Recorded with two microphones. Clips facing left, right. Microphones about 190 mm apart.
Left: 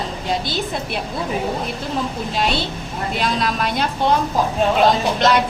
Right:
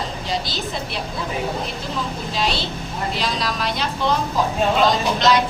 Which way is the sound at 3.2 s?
55° left (ahead or behind).